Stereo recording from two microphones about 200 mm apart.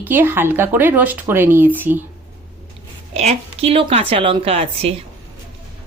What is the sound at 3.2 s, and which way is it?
A woman's voice, 30° right (ahead or behind).